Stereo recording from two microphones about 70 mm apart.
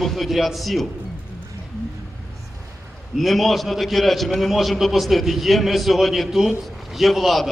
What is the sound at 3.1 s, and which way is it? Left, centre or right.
A man's voice, centre.